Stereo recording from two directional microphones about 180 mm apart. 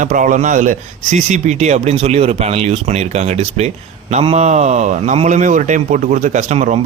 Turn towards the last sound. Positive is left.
turn(degrees=-40)  # may be behind; listen again after turning